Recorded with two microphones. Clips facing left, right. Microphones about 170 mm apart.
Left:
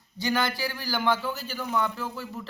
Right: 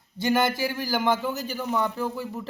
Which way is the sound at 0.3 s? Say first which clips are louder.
Right 4 dB; 20° right (ahead or behind).